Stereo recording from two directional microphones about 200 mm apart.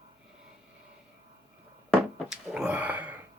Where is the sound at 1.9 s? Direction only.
Centre (ahead or behind).